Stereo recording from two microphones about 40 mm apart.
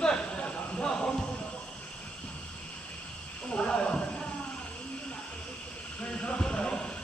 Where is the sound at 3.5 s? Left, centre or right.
Left.